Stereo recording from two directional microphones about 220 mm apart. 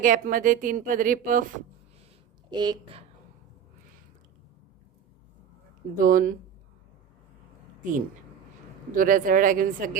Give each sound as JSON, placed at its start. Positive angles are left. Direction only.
{"t": 0.0, "sound": "a woman's voice", "side_deg": -35}
{"t": 2.5, "sound": "a woman's voice", "side_deg": -20}
{"t": 6.0, "sound": "a woman's voice", "side_deg": -40}
{"t": 7.8, "sound": "a woman's voice", "side_deg": -35}